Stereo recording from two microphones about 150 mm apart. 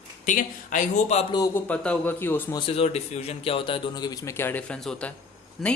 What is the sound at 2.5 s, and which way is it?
A man's voice, 40° left (ahead or behind).